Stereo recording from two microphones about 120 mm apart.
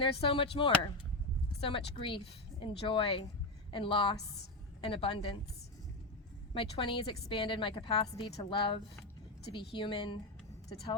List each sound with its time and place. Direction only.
0.0 s a woman's voice: 45° left (ahead or behind)
6.5 s a woman's voice: 45° left (ahead or behind)